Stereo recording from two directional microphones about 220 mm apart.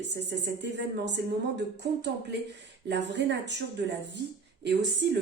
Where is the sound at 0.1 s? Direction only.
50° right (ahead or behind).